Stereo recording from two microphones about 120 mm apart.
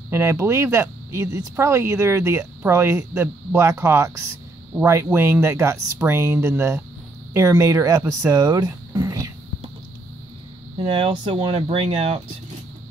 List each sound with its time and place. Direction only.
0.1 s speech: 25° right (ahead or behind)
10.9 s speech: 45° right (ahead or behind)